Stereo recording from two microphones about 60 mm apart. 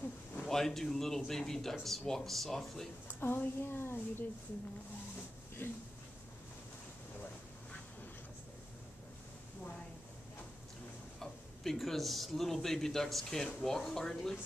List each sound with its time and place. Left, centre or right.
0.5 s speech: centre
3.2 s speech: left
5.6 s speech: left
11.1 s speech: centre